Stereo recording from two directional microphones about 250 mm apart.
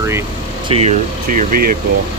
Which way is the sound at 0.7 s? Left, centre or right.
Right.